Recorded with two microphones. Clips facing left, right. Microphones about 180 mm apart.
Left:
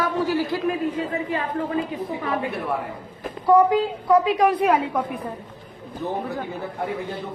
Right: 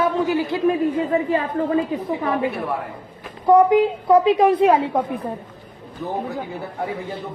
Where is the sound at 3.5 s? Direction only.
20° right (ahead or behind).